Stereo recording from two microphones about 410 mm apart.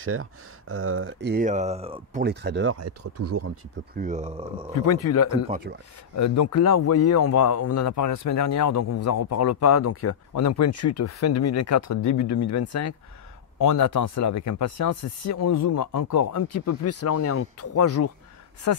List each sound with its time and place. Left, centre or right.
0.0 s speech: right
3.9 s speech: centre
4.7 s speech: left
5.5 s speech: right
6.1 s speech: left